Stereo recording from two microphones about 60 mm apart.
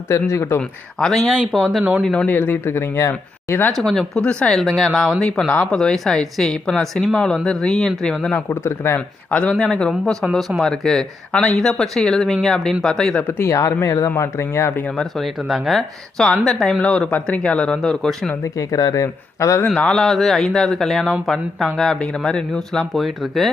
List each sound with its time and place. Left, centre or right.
0.1 s speech: left
0.9 s speech: centre
1.8 s speech: right
2.2 s speech: left
3.8 s speech: centre
8.4 s speech: left
9.5 s speech: centre
13.2 s speech: left
14.9 s speech: centre
17.1 s speech: left
18.4 s speech: left
19.9 s speech: centre